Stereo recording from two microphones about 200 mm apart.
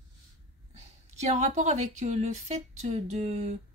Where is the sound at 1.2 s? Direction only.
35° right (ahead or behind).